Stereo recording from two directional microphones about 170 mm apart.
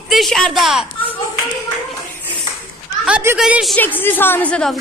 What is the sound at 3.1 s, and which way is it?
Speech, 5° right (ahead or behind).